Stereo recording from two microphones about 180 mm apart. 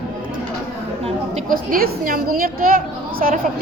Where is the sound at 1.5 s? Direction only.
55° right (ahead or behind).